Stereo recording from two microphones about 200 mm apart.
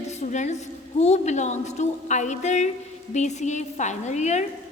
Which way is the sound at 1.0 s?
35° left (ahead or behind).